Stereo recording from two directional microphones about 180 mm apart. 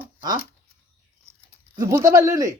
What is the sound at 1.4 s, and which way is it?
Speech, 15° right (ahead or behind).